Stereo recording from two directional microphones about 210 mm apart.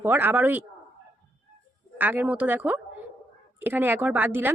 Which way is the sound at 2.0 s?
10° right (ahead or behind).